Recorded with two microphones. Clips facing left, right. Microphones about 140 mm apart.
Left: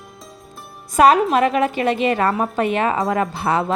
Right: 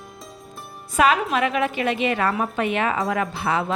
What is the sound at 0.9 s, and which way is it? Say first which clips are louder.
A woman's voice: left 6 dB; 40° left (ahead or behind).